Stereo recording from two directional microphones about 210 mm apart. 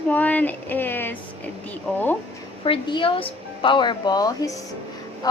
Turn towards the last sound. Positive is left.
turn(degrees=20)  # may be behind; listen again after turning